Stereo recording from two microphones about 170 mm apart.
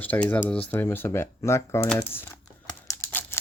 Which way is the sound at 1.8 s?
10° left (ahead or behind).